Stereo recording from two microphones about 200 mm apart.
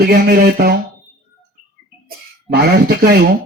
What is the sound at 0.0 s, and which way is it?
Speech, 50° right (ahead or behind).